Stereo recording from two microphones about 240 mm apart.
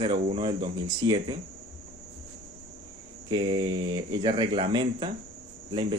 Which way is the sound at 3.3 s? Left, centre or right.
Centre.